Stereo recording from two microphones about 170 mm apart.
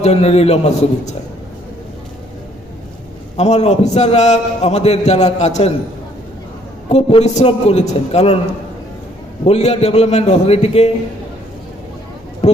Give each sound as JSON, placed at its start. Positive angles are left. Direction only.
{"t": 0.0, "sound": "a man's voice", "side_deg": 35}
{"t": 3.3, "sound": "a man's voice", "side_deg": 40}
{"t": 6.9, "sound": "a man's voice", "side_deg": 40}
{"t": 9.4, "sound": "a man's voice", "side_deg": 40}